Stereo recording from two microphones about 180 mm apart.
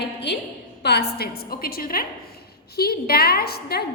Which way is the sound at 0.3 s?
70° left (ahead or behind).